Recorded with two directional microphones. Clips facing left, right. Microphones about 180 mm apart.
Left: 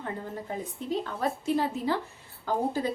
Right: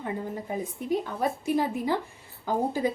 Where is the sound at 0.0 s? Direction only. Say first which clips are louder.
Right 3 dB; 15° right (ahead or behind).